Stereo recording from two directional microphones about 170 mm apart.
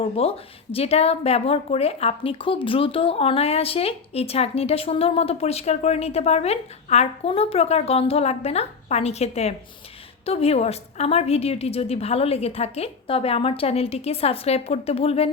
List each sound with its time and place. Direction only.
0.0 s a woman's voice: 35° left (ahead or behind)